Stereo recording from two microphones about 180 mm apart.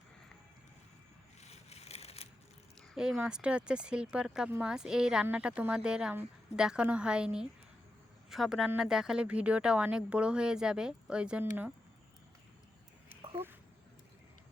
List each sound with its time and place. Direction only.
1.4 s a sound: 35° left (ahead or behind)
2.9 s speech: 5° right (ahead or behind)
13.4 s speech: 10° right (ahead or behind)